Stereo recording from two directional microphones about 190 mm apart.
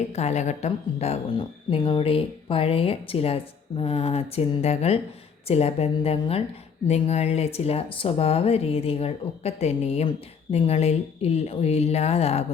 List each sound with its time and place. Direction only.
0.1 s speech: 35° left (ahead or behind)